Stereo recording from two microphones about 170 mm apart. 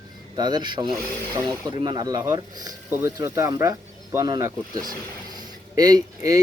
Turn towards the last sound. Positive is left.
turn(degrees=-20)  # may be behind; listen again after turning